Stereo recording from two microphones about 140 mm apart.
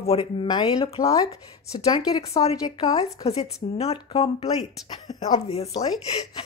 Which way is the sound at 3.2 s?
45° left (ahead or behind).